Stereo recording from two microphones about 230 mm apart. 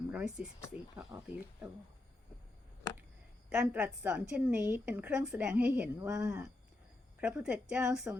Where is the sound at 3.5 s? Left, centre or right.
Centre.